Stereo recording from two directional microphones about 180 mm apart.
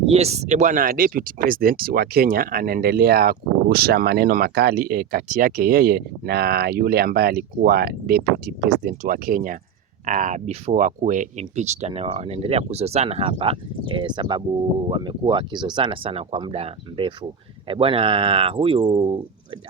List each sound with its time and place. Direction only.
0.1 s speech: 35° right (ahead or behind)